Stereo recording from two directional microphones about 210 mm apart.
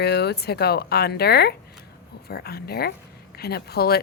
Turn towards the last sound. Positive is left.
turn(degrees=50)  # may be behind; listen again after turning